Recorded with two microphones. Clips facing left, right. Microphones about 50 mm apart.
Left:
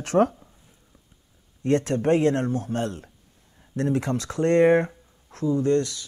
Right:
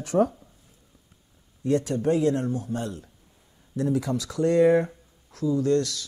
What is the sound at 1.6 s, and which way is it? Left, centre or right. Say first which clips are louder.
Speech: left 2 dB; left.